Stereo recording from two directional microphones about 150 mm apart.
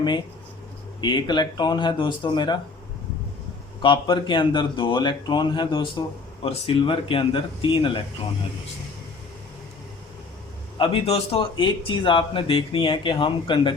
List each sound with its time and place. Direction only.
1.0 s speech: 30° left (ahead or behind)
3.8 s speech: 30° left (ahead or behind)
10.8 s speech: 40° left (ahead or behind)